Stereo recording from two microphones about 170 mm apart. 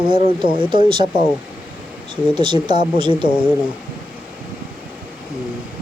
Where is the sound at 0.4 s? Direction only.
30° right (ahead or behind).